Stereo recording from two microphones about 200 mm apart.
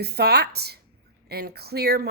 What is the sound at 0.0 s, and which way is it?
Speech, 50° right (ahead or behind).